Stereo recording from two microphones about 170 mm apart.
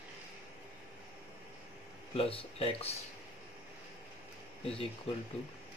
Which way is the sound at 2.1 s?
35° left (ahead or behind).